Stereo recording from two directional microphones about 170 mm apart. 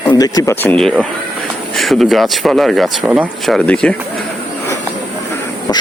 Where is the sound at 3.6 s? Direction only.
5° left (ahead or behind).